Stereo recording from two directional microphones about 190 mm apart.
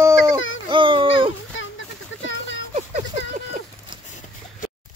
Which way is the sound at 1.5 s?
80° left.